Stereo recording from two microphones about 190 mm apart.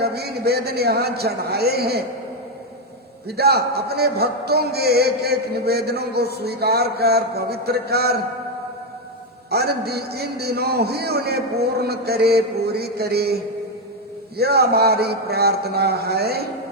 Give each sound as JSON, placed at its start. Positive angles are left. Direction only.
{"t": 0.0, "sound": "a man's voice", "side_deg": -55}
{"t": 3.2, "sound": "a man's voice", "side_deg": -55}
{"t": 9.5, "sound": "a man's voice", "side_deg": -55}
{"t": 14.3, "sound": "a man's voice", "side_deg": -55}